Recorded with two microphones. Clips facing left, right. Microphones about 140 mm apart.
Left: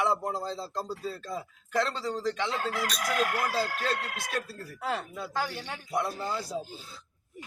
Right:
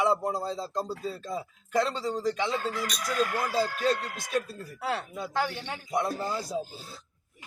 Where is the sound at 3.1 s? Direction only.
75° left (ahead or behind).